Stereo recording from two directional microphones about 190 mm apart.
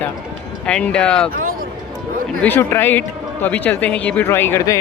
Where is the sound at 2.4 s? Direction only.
10° left (ahead or behind).